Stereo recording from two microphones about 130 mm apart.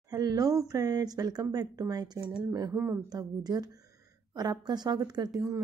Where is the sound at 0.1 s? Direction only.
30° right (ahead or behind).